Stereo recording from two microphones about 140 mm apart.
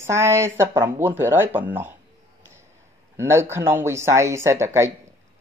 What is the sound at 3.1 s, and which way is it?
Speech, 20° right (ahead or behind).